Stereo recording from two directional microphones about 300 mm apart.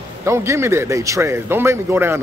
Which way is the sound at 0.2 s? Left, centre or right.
Centre.